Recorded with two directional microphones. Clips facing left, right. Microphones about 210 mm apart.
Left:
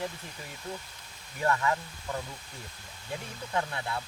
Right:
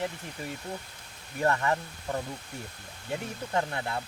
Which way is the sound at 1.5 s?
30° right (ahead or behind).